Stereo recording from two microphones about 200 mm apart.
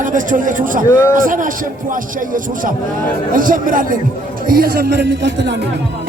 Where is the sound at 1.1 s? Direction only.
40° right (ahead or behind).